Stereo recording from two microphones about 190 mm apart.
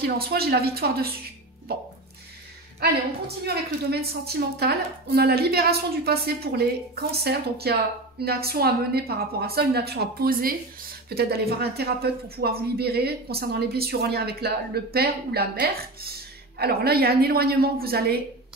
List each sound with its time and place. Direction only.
0.0 s speech: 55° right (ahead or behind)
2.8 s a woman's voice: 55° right (ahead or behind)